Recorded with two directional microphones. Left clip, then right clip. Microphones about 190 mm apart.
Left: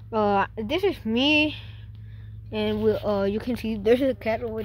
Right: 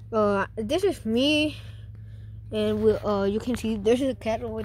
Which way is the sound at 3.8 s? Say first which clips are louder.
Left 3 dB; centre (ahead or behind).